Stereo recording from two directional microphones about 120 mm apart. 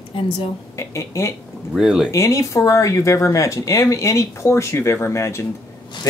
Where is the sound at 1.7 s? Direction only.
5° right (ahead or behind).